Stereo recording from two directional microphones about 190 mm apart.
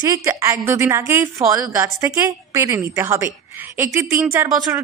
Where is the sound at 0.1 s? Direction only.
15° right (ahead or behind).